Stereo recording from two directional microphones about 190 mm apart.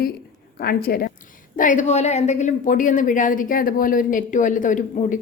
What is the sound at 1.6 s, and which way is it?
A woman's voice, 40° left (ahead or behind).